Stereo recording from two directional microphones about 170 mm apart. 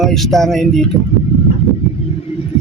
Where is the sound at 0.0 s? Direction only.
Centre (ahead or behind).